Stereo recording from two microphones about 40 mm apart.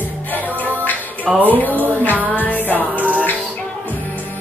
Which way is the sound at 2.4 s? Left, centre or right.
Left.